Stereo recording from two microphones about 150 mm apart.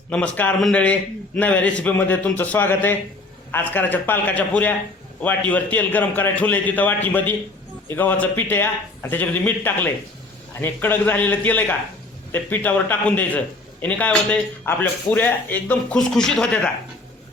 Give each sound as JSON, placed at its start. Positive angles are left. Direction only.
{"t": 0.1, "sound": "speech", "side_deg": 10}